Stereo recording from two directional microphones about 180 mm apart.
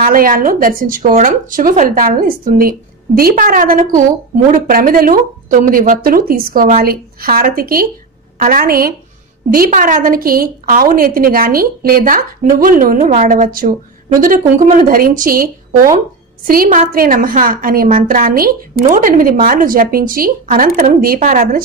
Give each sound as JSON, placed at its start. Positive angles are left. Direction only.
{"t": 0.0, "sound": "a woman's voice", "side_deg": -50}